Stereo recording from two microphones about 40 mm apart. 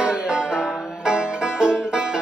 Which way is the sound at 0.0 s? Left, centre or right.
Right.